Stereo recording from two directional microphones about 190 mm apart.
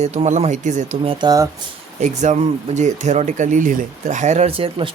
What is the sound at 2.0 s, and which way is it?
Speech, 40° right (ahead or behind).